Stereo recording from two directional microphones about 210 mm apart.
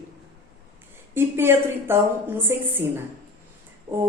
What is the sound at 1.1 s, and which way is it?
Speech, 10° right (ahead or behind).